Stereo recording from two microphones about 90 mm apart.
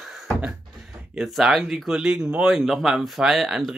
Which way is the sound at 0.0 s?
5° right (ahead or behind).